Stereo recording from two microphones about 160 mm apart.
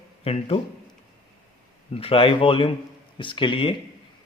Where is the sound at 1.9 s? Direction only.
35° left (ahead or behind).